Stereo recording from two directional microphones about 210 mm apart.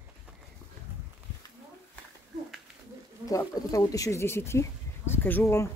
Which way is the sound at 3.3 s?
15° left (ahead or behind).